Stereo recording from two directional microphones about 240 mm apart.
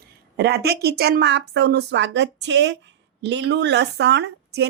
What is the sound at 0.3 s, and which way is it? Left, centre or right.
Speech, right.